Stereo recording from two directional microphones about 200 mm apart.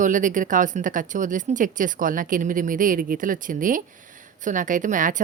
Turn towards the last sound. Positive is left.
turn(degrees=-40)  # may be behind; listen again after turning